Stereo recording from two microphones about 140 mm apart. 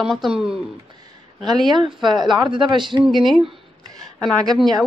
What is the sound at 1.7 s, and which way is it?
Speech, 35° right (ahead or behind).